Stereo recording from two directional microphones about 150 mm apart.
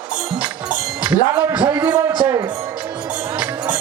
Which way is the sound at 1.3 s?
15° right (ahead or behind).